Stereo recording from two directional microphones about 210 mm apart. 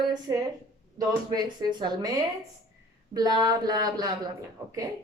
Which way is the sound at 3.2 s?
20° right (ahead or behind).